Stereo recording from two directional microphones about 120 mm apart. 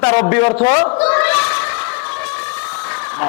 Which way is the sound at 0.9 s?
15° left (ahead or behind).